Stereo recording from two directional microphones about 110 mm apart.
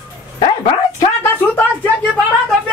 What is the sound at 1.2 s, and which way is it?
Speech, 15° left (ahead or behind).